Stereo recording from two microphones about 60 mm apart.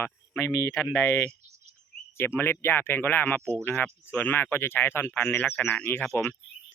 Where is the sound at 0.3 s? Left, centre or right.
Left.